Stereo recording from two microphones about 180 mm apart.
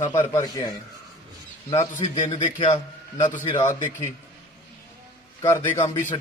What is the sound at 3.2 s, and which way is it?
Speech, 45° left (ahead or behind).